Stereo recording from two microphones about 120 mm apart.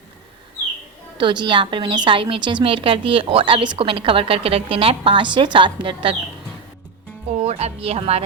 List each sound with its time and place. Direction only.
1.2 s a woman's voice: 40° right (ahead or behind)
7.3 s speech: 65° right (ahead or behind)